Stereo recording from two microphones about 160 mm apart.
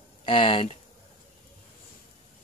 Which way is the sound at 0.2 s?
30° left (ahead or behind).